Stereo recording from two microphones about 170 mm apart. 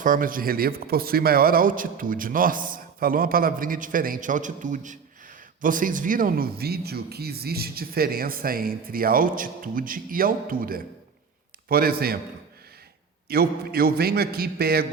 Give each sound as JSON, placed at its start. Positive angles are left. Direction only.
{"t": 0.0, "sound": "speech", "side_deg": -55}
{"t": 13.2, "sound": "speech", "side_deg": -65}